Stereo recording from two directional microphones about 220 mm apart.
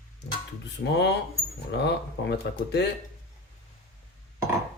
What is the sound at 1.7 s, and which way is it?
Speech, 50° left (ahead or behind).